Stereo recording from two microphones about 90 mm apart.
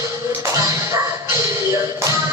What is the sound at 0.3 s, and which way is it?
Music, 35° right (ahead or behind).